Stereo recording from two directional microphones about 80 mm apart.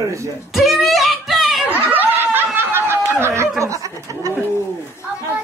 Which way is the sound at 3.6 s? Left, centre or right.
Right.